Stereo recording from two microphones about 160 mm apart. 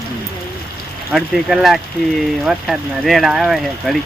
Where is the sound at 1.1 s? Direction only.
Centre (ahead or behind).